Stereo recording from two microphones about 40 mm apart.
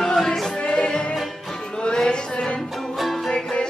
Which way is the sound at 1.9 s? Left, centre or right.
Centre.